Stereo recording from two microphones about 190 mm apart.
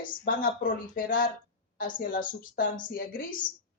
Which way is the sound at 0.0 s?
45° left (ahead or behind).